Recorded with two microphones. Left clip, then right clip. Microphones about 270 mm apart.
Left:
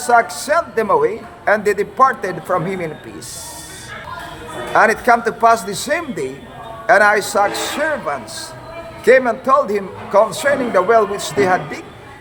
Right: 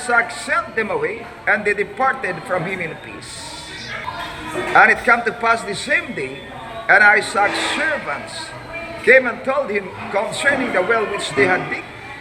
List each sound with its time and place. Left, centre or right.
0.1 s a man's voice: centre
4.7 s a man's voice: centre
9.0 s a man's voice: centre